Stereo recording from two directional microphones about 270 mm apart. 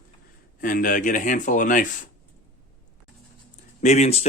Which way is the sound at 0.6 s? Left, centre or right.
Left.